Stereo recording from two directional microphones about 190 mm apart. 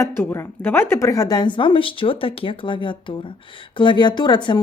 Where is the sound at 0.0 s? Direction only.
10° left (ahead or behind).